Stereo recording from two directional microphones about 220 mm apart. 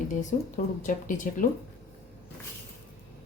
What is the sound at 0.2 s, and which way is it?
A woman's voice, 35° left (ahead or behind).